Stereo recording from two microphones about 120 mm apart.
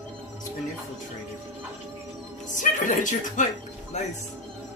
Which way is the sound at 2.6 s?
90° left.